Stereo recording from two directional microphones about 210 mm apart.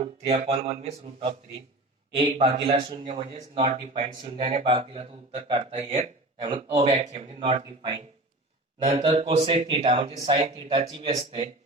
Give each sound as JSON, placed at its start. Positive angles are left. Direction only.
{"t": 0.0, "sound": "a man's voice", "side_deg": -25}
{"t": 6.9, "sound": "a man's voice", "side_deg": -35}